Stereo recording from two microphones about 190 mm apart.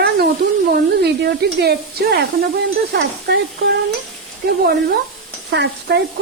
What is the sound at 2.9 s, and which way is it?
Stir, 55° right (ahead or behind).